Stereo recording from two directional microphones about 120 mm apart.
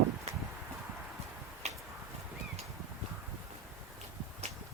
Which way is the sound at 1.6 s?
65° right (ahead or behind).